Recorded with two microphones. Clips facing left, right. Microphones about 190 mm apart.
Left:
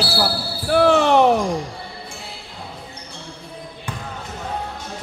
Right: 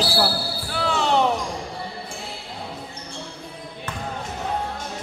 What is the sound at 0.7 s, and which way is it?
Basketball bounce, 60° left (ahead or behind).